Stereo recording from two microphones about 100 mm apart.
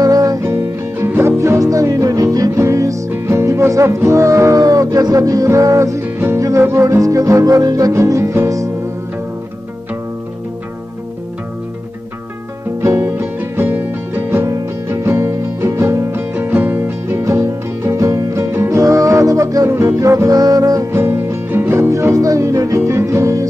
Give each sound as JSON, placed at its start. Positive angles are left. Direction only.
{"t": 0.0, "sound": "music", "side_deg": -35}
{"t": 12.8, "sound": "music", "side_deg": -25}
{"t": 17.2, "sound": "music", "side_deg": -30}
{"t": 20.9, "sound": "music", "side_deg": -25}